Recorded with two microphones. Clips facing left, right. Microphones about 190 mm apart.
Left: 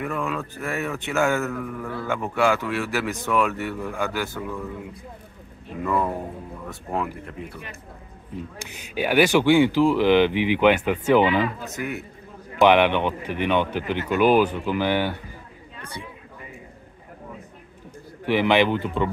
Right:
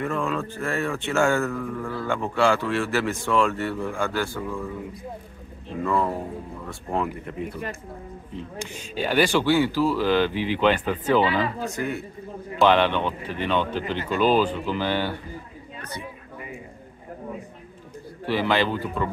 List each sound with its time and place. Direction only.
0.0 s a man's voice: 5° left (ahead or behind)
5.9 s a man's voice: 10° left (ahead or behind)
8.9 s speech: 10° left (ahead or behind)
18.2 s speech: 15° left (ahead or behind)